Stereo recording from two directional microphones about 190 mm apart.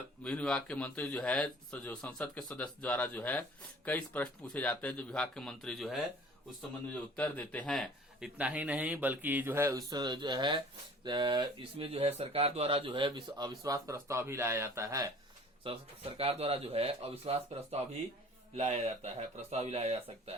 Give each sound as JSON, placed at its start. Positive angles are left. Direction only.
{"t": 0.2, "sound": "a man's voice", "side_deg": 5}
{"t": 15.6, "sound": "a man's voice", "side_deg": -30}